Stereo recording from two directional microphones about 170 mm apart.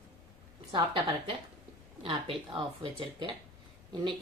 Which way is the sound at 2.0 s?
30° right (ahead or behind).